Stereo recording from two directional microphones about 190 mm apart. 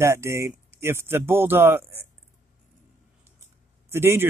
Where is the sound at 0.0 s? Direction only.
15° right (ahead or behind).